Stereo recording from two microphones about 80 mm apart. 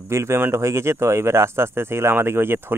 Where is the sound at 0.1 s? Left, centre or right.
Right.